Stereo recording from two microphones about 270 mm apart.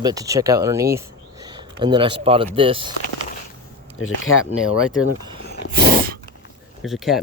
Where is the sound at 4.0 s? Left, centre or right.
Left.